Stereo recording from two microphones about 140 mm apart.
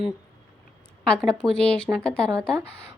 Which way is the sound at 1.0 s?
5° left (ahead or behind).